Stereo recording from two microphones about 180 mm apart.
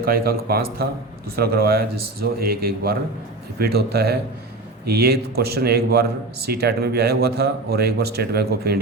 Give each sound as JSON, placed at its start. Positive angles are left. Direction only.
{"t": 0.0, "sound": "a man's voice", "side_deg": -55}